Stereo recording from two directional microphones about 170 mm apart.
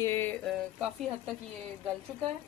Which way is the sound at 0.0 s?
15° left (ahead or behind).